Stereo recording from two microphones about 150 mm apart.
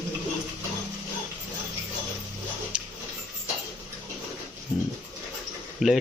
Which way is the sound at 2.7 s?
5° right (ahead or behind).